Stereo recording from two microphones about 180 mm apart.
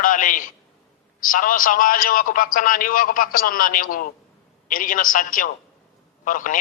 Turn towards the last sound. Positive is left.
turn(degrees=45)  # may be behind; listen again after turning